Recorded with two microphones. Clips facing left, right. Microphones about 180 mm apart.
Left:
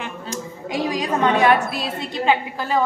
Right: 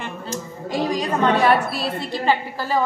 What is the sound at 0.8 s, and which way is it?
Speech, centre (ahead or behind).